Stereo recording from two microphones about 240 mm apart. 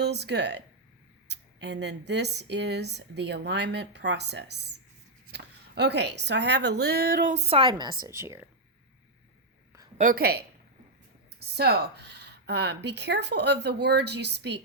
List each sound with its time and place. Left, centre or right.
0.0 s a woman's voice: right; by 8.4 s centre
10.0 s a woman's voice: right